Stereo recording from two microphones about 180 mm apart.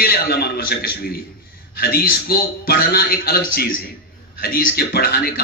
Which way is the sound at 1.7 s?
60° left (ahead or behind).